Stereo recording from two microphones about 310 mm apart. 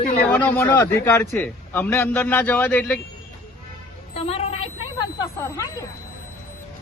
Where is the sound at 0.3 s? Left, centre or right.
Centre.